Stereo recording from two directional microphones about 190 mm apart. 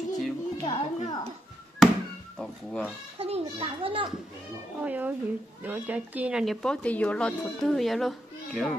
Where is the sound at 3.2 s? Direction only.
30° right (ahead or behind).